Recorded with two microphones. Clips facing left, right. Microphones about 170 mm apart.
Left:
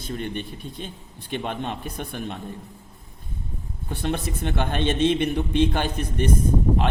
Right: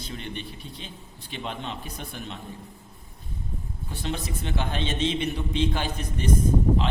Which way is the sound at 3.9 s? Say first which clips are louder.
Left 5 dB; 55° left (ahead or behind).